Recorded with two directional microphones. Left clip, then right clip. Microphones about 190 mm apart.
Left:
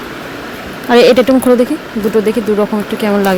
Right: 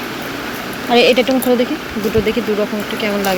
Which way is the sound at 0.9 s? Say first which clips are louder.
Left 5 dB; 45° left (ahead or behind).